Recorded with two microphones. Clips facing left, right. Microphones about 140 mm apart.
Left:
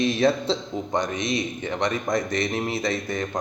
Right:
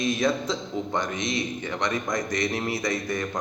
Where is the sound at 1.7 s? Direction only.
25° left (ahead or behind).